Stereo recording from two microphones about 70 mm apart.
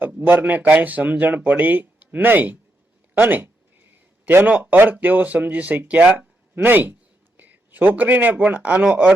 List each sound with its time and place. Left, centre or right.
0.2 s speech: right